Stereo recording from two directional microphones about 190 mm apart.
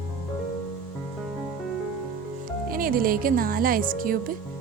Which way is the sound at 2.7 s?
50° right (ahead or behind).